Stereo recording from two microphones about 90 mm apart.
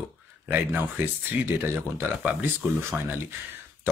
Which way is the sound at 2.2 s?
15° right (ahead or behind).